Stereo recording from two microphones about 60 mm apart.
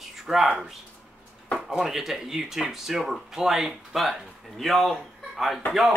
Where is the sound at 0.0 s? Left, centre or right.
Centre.